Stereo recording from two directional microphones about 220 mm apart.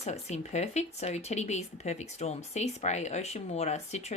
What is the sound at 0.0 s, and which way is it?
Speech, 30° left (ahead or behind).